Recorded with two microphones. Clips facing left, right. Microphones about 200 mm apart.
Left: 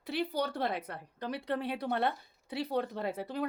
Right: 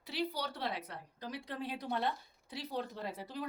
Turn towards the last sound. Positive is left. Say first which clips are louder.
# left 7 dB
turn(degrees=60)  # may be behind; listen again after turning